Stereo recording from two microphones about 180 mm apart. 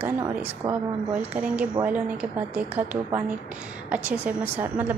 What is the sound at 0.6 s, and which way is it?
Speech, 20° right (ahead or behind).